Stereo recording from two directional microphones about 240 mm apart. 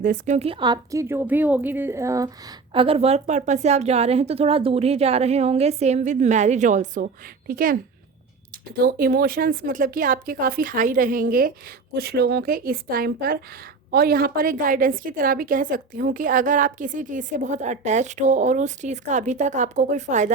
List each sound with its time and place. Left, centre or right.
0.0 s a woman's voice: right